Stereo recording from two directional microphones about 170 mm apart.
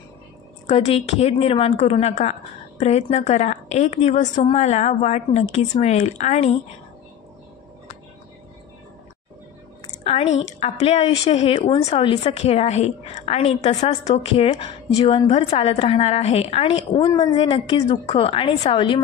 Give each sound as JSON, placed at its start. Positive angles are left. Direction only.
{"t": 0.7, "sound": "a woman's voice", "side_deg": 35}
{"t": 9.8, "sound": "a sound", "side_deg": 40}
{"t": 10.4, "sound": "a woman's voice", "side_deg": 40}